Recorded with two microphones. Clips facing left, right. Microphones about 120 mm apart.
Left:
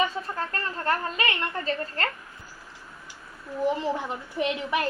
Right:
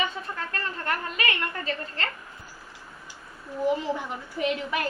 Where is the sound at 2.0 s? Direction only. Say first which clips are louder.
Left 3 dB; 45° left (ahead or behind).